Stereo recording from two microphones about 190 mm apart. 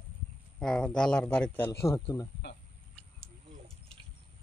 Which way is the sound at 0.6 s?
5° left (ahead or behind).